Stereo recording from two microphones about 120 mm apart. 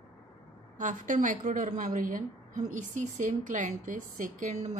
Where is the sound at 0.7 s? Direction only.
90° right.